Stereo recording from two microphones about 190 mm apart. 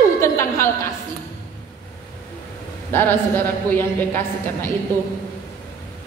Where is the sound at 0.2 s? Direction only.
15° left (ahead or behind).